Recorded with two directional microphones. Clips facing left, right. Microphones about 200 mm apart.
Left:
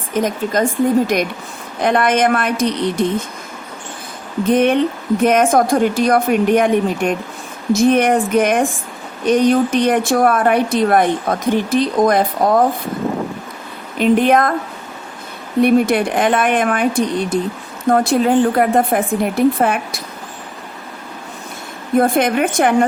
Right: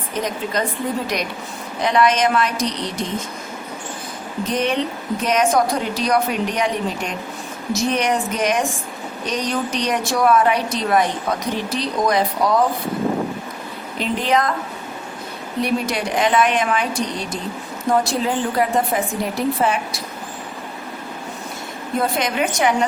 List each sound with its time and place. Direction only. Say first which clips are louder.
0.1 s a woman's voice: left 6 dB; 45° left (ahead or behind)
4.4 s a woman's voice: left 8 dB; 55° left (ahead or behind)
14.0 s speech: left 7 dB; 55° left (ahead or behind)
15.6 s a woman's voice: left 9 dB; 55° left (ahead or behind)
21.9 s speech: left 7 dB; 50° left (ahead or behind)